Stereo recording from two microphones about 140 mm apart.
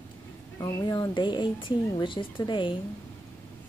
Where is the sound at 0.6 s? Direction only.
30° left (ahead or behind).